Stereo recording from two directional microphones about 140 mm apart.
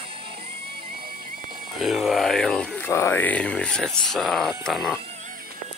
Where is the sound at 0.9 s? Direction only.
90° right.